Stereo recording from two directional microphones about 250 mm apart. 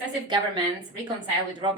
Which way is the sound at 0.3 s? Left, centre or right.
Centre.